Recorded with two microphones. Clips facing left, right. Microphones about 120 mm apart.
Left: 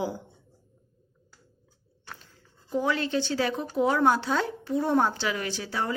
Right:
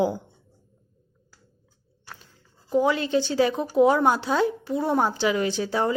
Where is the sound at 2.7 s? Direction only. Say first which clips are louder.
Right 5 dB; 15° right (ahead or behind).